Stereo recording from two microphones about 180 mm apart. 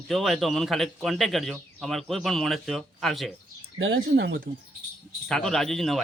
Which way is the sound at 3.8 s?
75° right (ahead or behind).